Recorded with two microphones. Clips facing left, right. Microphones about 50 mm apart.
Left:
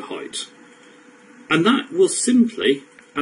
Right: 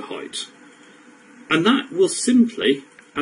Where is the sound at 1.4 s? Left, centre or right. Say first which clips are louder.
Left 1 dB; centre.